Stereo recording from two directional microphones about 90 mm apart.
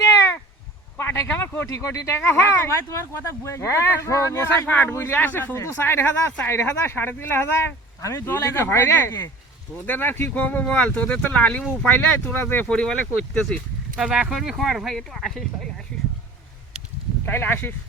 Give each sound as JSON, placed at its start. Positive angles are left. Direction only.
{"t": 0.9, "sound": "a sound", "side_deg": 30}
{"t": 1.4, "sound": "speech", "side_deg": 30}
{"t": 12.6, "sound": "speech", "side_deg": 10}
{"t": 14.0, "sound": "speech", "side_deg": -5}
{"t": 17.2, "sound": "speech", "side_deg": 25}